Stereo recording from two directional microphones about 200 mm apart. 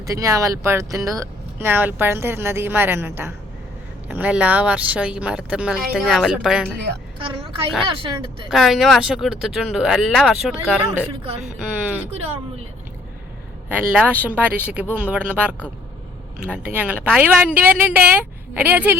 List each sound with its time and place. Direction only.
0.0 s speech: 15° right (ahead or behind)
7.2 s speech: 25° right (ahead or behind)
8.4 s speech: centre (ahead or behind)
13.7 s speech: 5° right (ahead or behind)